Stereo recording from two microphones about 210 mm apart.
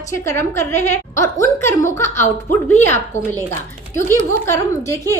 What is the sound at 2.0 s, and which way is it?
Speech, 35° left (ahead or behind).